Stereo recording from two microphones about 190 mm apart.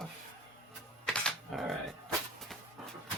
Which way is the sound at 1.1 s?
Centre (ahead or behind).